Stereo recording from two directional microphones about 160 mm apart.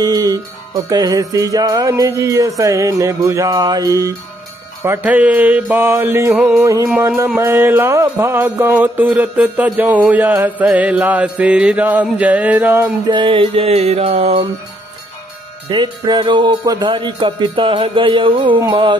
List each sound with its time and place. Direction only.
0.0 s music: 25° right (ahead or behind)
13.0 s speech: 30° right (ahead or behind)
15.7 s speech: 30° right (ahead or behind)
18.6 s music: 30° right (ahead or behind)